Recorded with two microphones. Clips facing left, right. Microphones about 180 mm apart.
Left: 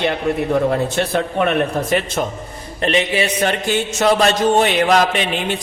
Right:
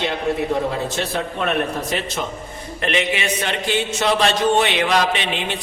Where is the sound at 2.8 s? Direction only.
35° left (ahead or behind).